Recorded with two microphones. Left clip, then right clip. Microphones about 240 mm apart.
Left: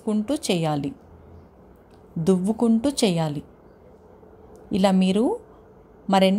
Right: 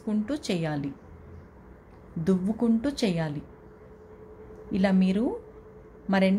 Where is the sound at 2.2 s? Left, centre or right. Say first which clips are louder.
Left 6 dB; left.